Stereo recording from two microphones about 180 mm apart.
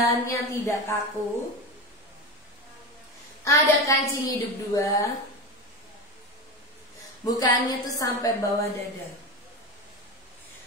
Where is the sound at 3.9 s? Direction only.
15° left (ahead or behind).